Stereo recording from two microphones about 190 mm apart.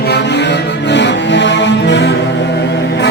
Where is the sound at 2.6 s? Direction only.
65° left (ahead or behind).